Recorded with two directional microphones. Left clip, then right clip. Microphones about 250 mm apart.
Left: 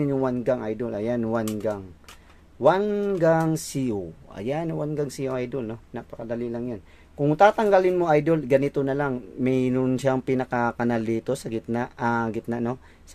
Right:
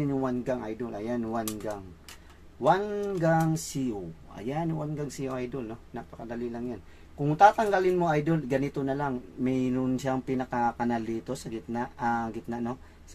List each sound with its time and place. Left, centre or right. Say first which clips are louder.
0.0 s speech: left 6 dB; left